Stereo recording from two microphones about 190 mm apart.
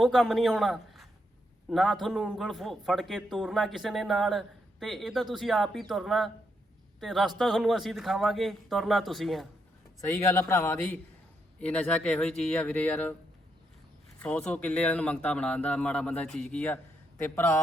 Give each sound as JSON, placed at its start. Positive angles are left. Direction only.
{"t": 0.0, "sound": "a man's voice", "side_deg": 0}
{"t": 10.1, "sound": "a man's voice", "side_deg": 15}
{"t": 14.2, "sound": "a man's voice", "side_deg": 5}